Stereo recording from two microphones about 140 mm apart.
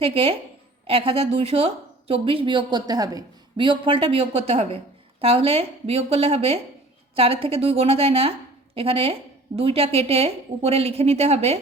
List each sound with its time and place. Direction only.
0.0 s a woman's voice: 45° right (ahead or behind)